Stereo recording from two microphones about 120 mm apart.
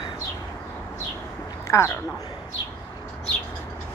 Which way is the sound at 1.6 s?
25° left (ahead or behind).